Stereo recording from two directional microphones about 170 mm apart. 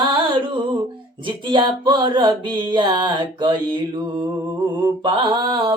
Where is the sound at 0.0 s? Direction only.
30° right (ahead or behind).